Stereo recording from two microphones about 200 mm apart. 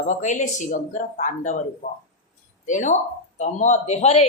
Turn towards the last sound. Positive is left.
turn(degrees=35)  # may be behind; listen again after turning